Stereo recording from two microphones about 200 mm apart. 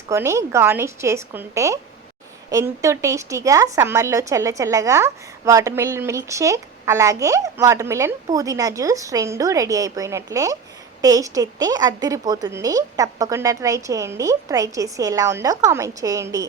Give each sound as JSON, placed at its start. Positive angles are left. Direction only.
{"t": 0.1, "sound": "a woman's voice", "side_deg": -15}